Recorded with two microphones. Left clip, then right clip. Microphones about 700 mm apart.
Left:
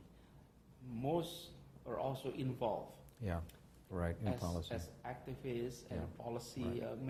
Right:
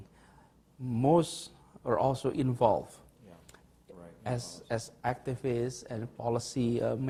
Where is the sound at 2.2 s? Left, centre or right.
Right.